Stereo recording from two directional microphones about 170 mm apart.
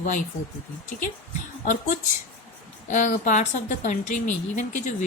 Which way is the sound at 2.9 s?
50° left (ahead or behind).